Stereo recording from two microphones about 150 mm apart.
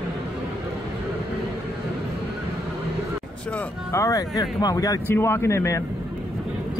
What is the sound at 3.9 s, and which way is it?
Speech, 20° left (ahead or behind).